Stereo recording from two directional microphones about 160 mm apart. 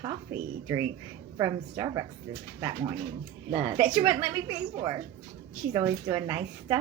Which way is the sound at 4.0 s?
25° right (ahead or behind).